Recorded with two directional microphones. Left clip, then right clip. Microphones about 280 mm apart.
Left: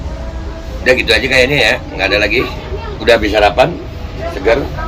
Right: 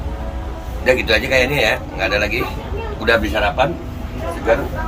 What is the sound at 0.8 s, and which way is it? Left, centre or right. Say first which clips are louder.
A man's voice: left 4 dB; centre.